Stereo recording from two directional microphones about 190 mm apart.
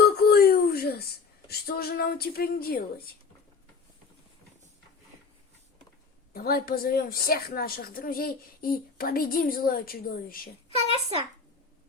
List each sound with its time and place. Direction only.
0.0 s a sound: 55° left (ahead or behind)
1.5 s speech: 55° left (ahead or behind)
6.3 s a woman's voice: 50° left (ahead or behind)